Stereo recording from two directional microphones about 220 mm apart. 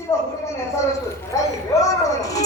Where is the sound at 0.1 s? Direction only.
15° left (ahead or behind).